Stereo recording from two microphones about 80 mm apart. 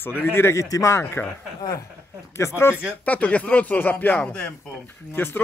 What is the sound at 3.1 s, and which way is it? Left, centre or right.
Speech, centre.